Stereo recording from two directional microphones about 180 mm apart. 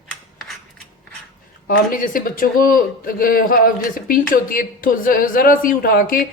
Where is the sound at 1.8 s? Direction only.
50° left (ahead or behind).